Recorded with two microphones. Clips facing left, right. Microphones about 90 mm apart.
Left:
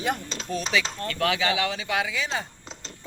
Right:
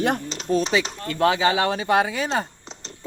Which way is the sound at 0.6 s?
25° right (ahead or behind).